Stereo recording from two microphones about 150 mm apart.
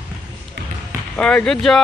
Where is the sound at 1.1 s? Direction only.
5° left (ahead or behind).